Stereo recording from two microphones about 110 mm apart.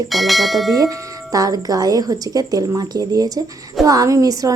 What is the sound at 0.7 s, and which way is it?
A woman's voice, 30° right (ahead or behind).